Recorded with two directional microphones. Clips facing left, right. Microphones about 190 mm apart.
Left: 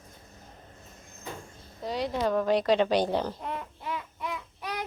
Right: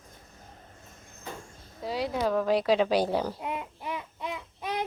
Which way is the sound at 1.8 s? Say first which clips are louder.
Even; 5° right (ahead or behind).